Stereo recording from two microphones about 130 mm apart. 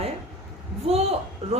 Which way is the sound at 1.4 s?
55° right (ahead or behind).